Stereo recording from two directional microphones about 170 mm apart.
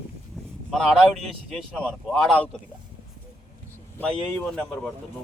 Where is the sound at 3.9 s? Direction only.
10° left (ahead or behind).